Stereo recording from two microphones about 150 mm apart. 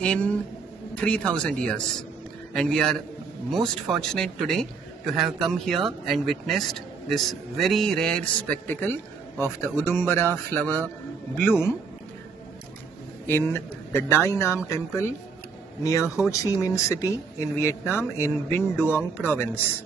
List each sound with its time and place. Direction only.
0.0 s a man's voice: 10° left (ahead or behind)
13.3 s speech: 15° left (ahead or behind)